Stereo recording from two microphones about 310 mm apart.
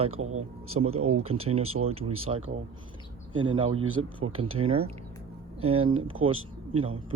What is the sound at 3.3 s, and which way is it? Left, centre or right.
Speech, centre.